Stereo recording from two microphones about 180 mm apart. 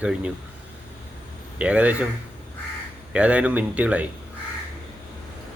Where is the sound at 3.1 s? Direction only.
5° right (ahead or behind).